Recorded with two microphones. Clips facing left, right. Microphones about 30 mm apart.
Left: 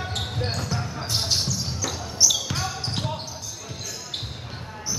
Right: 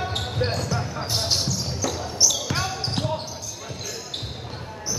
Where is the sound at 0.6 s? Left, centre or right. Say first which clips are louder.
Right 2 dB; centre.